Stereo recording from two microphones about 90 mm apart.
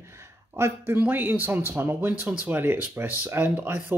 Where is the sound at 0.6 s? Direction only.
30° right (ahead or behind).